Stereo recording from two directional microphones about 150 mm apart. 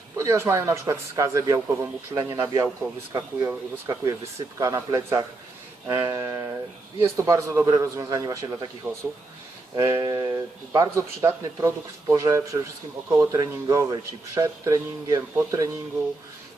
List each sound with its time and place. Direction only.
0.2 s speech: 20° right (ahead or behind)